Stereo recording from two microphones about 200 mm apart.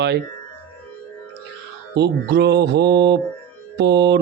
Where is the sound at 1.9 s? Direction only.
55° right (ahead or behind).